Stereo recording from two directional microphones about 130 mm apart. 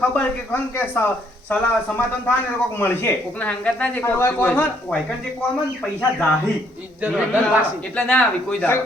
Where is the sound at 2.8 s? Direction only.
15° left (ahead or behind).